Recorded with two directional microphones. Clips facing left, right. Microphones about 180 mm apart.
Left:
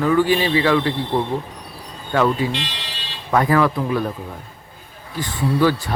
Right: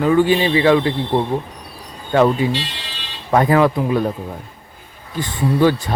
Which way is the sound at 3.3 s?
25° right (ahead or behind).